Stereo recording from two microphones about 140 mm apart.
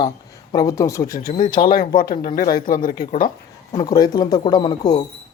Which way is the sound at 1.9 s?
90° left.